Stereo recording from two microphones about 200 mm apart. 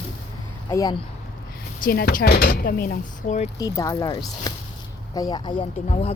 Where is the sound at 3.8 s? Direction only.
15° left (ahead or behind).